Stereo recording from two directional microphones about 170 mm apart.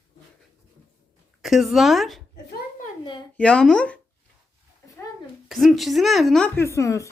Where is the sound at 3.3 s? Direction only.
5° left (ahead or behind).